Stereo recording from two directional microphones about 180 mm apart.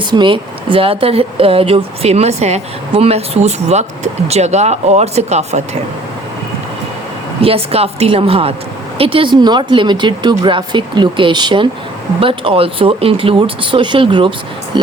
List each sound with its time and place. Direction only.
0.1 s speech: 25° right (ahead or behind)
7.4 s speech: 35° right (ahead or behind)